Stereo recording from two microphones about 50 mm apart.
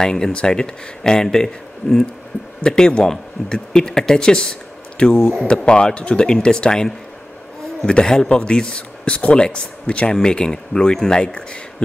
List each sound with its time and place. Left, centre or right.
0.0 s speech: centre